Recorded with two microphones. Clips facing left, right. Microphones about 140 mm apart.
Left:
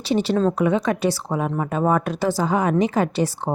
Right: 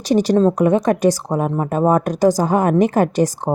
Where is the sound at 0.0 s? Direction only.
40° right (ahead or behind).